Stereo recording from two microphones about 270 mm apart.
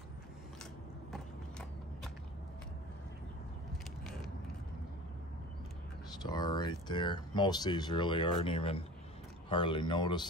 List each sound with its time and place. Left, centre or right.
6.2 s speech: centre